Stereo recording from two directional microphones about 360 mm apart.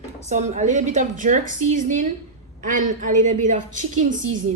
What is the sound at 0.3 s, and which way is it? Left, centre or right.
A woman's voice, centre.